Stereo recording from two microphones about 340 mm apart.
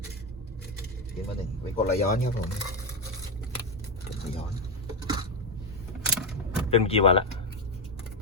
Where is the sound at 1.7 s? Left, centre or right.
Left.